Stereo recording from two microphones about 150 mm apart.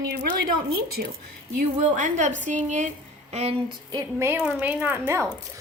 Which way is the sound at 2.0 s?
55° right (ahead or behind).